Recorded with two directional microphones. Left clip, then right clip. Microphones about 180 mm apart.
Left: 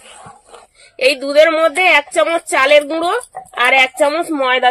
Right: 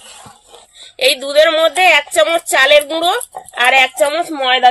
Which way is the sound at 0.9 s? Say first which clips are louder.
Even; 45° left (ahead or behind).